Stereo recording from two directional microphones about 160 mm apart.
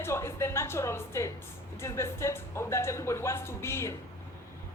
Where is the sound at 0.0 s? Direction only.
15° left (ahead or behind).